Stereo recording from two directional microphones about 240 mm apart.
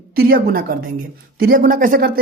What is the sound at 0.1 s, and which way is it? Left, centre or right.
Speech, right.